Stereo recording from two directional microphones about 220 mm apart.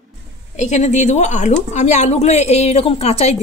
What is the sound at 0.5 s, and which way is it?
A woman's voice, 30° left (ahead or behind).